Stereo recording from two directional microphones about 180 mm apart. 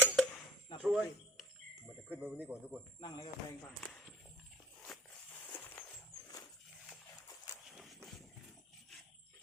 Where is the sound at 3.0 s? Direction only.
20° left (ahead or behind).